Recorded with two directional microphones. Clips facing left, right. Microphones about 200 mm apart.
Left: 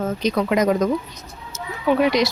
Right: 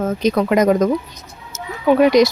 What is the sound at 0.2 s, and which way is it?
Speech, 50° right (ahead or behind).